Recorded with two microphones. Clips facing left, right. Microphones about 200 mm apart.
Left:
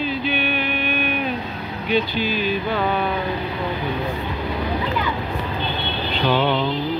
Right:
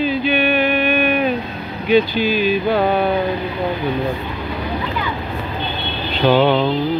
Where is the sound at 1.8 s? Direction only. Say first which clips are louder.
Right 7 dB; 10° right (ahead or behind).